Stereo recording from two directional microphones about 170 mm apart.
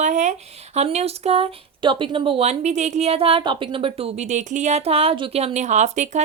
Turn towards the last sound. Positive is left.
turn(degrees=-45)  # may be behind; listen again after turning